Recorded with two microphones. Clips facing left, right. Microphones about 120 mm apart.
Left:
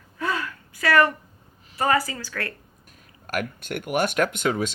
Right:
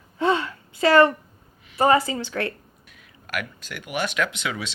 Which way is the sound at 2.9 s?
45° left (ahead or behind).